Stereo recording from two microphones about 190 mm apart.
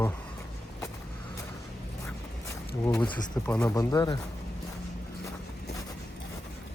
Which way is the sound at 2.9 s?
5° left (ahead or behind).